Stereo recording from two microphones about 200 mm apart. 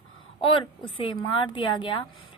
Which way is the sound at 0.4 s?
25° left (ahead or behind).